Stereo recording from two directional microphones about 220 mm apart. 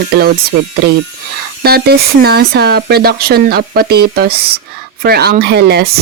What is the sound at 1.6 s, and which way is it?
Speech, 45° right (ahead or behind).